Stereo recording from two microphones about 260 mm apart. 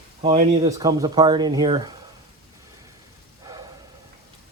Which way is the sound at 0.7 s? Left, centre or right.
Centre.